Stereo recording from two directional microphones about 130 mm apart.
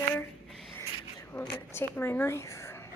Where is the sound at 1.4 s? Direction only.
20° left (ahead or behind).